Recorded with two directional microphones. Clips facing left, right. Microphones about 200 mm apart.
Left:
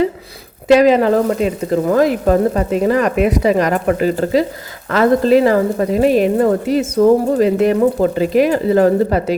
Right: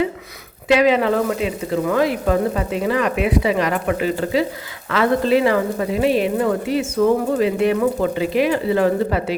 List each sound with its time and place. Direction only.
0.7 s speech: 40° left (ahead or behind)